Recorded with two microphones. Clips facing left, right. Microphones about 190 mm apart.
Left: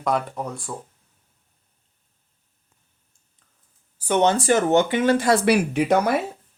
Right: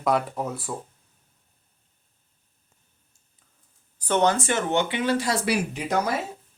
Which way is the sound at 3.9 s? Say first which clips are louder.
Left 2 dB; 10° left (ahead or behind).